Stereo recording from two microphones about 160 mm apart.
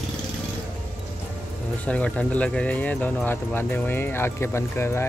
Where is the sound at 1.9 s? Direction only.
10° left (ahead or behind).